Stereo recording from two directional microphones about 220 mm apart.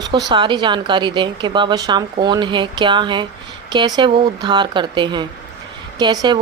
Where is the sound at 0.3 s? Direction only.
20° right (ahead or behind).